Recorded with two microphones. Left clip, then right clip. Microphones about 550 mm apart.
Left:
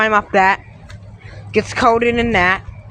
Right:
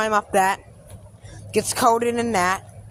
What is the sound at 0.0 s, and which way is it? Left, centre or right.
Speech, right.